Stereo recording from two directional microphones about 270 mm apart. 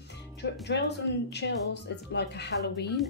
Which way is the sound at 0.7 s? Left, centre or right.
Left.